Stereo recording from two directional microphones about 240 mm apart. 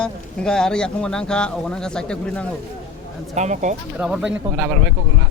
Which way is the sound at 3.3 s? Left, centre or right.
Right.